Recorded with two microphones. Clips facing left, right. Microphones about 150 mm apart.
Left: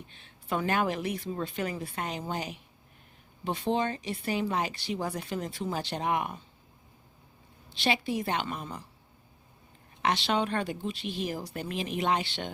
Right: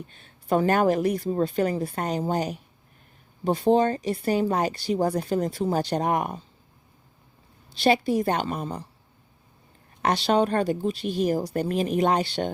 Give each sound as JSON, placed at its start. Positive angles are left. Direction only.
{"t": 0.1, "sound": "a woman's voice", "side_deg": -40}
{"t": 7.7, "sound": "a woman's voice", "side_deg": -40}
{"t": 10.0, "sound": "a woman's voice", "side_deg": -40}